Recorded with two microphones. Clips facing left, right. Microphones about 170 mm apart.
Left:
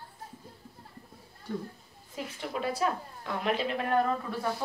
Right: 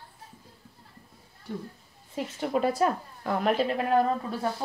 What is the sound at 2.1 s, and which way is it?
A woman's voice, 45° right (ahead or behind).